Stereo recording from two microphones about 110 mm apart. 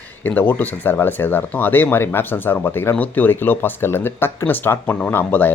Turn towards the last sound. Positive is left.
turn(degrees=15)  # may be behind; listen again after turning